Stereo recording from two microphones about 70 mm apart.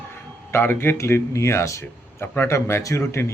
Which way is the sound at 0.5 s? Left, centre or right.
Left.